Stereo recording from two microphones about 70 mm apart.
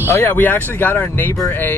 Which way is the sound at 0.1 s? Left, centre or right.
Left.